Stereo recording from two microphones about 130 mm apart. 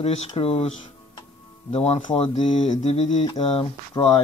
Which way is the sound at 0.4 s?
50° left (ahead or behind).